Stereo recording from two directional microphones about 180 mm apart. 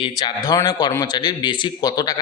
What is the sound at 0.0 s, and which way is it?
Speech, 20° left (ahead or behind).